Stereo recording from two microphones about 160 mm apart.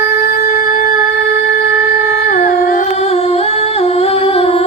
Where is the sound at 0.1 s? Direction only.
70° left (ahead or behind).